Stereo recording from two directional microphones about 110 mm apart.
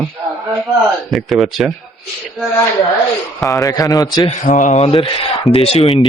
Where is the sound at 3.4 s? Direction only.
30° left (ahead or behind).